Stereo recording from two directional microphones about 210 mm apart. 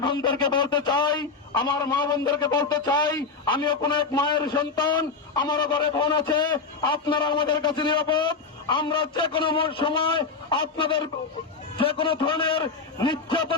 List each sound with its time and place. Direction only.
0.0 s a man's voice: 20° left (ahead or behind)